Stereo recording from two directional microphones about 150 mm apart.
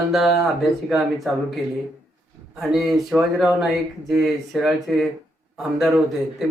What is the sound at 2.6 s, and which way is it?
Speech, centre (ahead or behind).